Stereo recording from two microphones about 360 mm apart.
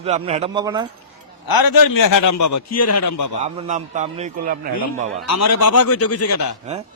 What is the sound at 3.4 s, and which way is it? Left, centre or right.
A man's voice, centre.